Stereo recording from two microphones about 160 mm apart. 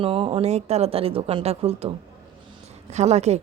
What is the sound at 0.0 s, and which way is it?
Speech, 35° right (ahead or behind).